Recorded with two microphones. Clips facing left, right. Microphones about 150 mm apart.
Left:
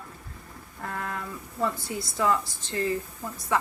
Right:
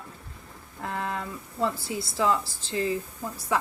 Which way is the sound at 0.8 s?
20° right (ahead or behind).